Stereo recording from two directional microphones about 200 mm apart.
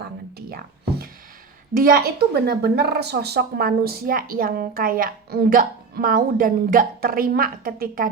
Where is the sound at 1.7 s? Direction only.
45° right (ahead or behind).